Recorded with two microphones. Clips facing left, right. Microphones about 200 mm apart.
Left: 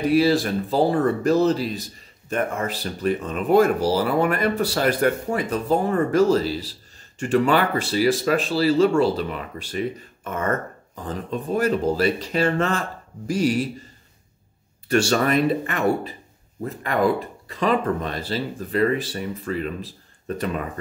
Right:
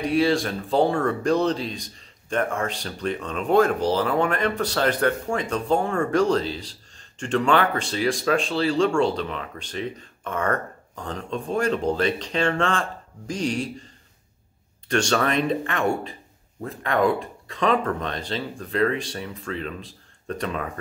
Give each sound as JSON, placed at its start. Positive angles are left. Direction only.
{"t": 0.0, "sound": "speech", "side_deg": 5}
{"t": 14.9, "sound": "speech", "side_deg": 5}